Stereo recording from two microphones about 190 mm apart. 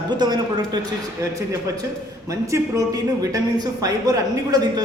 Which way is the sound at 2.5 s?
20° right (ahead or behind).